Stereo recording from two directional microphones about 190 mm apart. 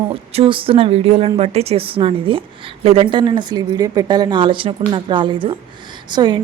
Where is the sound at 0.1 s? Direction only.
30° right (ahead or behind).